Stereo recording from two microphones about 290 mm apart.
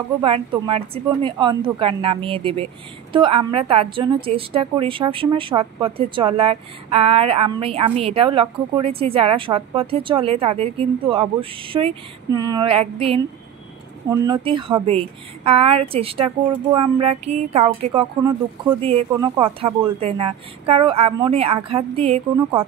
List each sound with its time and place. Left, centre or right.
0.2 s a woman's voice: centre